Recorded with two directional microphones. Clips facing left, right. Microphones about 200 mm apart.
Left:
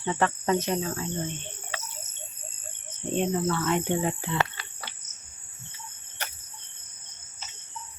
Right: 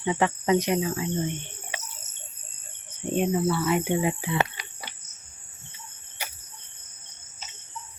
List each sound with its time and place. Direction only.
0.0 s speech: 15° right (ahead or behind)
3.1 s speech: 10° right (ahead or behind)
6.2 s cricket: 10° right (ahead or behind)